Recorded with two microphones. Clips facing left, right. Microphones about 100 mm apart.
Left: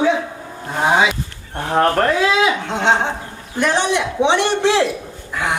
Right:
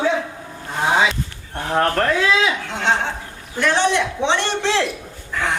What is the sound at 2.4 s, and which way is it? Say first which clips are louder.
A man's voice: left 4 dB; 20° left (ahead or behind).